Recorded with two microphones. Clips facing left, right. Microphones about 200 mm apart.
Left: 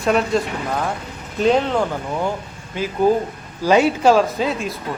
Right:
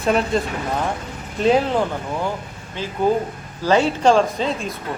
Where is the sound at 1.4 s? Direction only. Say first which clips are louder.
Even; 5° right (ahead or behind).